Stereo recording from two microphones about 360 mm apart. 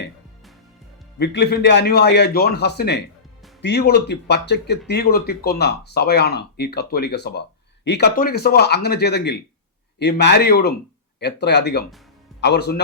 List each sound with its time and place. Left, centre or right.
1.2 s speech: left